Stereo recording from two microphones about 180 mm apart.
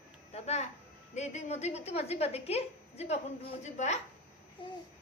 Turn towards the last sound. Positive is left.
turn(degrees=30)  # may be behind; listen again after turning